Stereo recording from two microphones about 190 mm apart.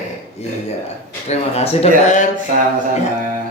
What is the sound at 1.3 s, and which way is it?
Speech, 35° left (ahead or behind).